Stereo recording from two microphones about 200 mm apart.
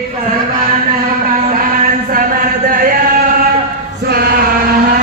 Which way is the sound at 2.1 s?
45° right (ahead or behind).